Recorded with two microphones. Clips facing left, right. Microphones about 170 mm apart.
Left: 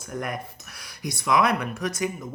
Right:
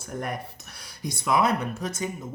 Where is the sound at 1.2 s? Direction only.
30° right (ahead or behind).